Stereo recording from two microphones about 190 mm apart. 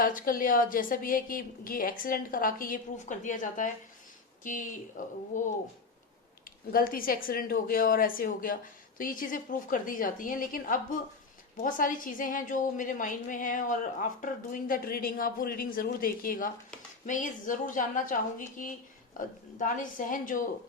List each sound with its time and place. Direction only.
0.0 s a woman's voice: 45° left (ahead or behind)
6.7 s a woman's voice: 50° left (ahead or behind)